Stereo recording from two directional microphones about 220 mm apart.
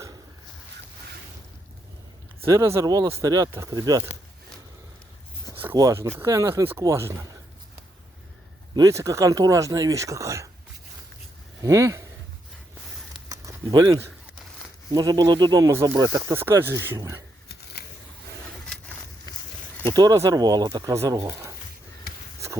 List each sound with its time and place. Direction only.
2.4 s speech: 15° right (ahead or behind)
5.6 s speech: 15° right (ahead or behind)
8.7 s speech: 15° right (ahead or behind)
11.6 s speech: 15° right (ahead or behind)
13.2 s a sound: 15° right (ahead or behind)
14.9 s speech: 20° right (ahead or behind)
17.5 s a sound: 50° left (ahead or behind)
19.3 s a sound: 15° left (ahead or behind)
20.0 s speech: 15° right (ahead or behind)